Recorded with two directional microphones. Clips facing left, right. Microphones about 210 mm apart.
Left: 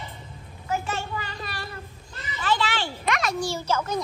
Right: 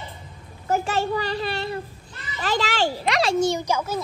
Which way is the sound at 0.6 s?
45° right (ahead or behind).